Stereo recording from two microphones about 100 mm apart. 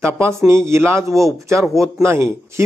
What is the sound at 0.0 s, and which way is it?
A man's voice, 25° right (ahead or behind).